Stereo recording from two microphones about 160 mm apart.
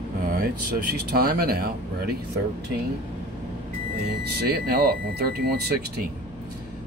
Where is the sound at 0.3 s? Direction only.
65° right (ahead or behind).